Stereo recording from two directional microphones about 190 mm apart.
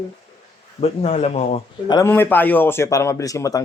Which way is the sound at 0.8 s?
30° left (ahead or behind).